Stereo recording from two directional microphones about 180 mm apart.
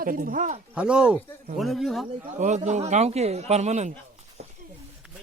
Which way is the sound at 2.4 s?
40° right (ahead or behind).